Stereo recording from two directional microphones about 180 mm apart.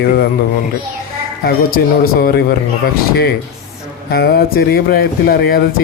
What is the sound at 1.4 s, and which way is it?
Speech, 55° left (ahead or behind).